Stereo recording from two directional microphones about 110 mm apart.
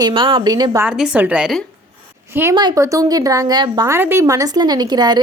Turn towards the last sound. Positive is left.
turn(degrees=-40)  # may be behind; listen again after turning